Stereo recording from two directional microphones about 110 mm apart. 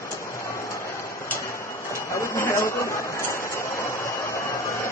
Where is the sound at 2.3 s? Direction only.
20° left (ahead or behind).